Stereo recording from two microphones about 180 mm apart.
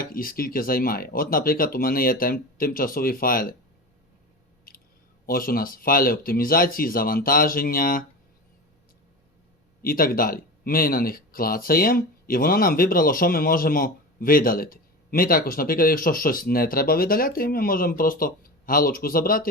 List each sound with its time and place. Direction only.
0.0 s speech: 55° left (ahead or behind)
4.7 s clicking: 50° left (ahead or behind)
5.2 s speech: 55° left (ahead or behind)
9.8 s speech: 55° left (ahead or behind)